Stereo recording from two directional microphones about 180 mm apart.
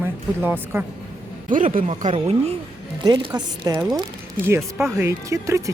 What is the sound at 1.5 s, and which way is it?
A woman's voice, 45° right (ahead or behind).